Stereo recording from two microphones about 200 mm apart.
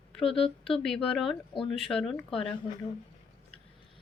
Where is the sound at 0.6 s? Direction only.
Centre (ahead or behind).